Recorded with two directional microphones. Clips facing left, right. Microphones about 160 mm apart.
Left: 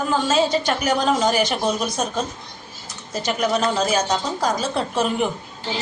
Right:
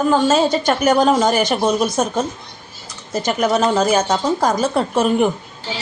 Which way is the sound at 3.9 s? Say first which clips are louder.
Right 5 dB; 50° right (ahead or behind).